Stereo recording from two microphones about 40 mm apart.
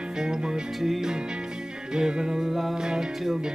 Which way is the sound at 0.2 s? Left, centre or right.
Centre.